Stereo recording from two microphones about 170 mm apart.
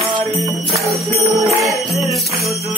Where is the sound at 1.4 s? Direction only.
20° right (ahead or behind).